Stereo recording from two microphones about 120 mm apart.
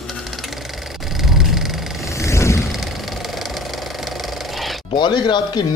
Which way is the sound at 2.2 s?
25° left (ahead or behind).